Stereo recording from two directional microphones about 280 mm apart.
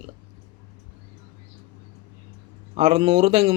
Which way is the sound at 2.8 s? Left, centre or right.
Centre.